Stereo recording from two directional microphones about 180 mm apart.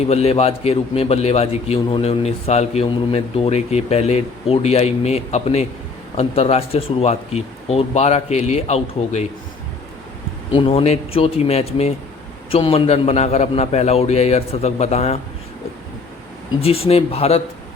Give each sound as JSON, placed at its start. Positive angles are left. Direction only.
{"t": 0.1, "sound": "a man's voice", "side_deg": 35}
{"t": 10.5, "sound": "a man's voice", "side_deg": 30}
{"t": 16.6, "sound": "a man's voice", "side_deg": 35}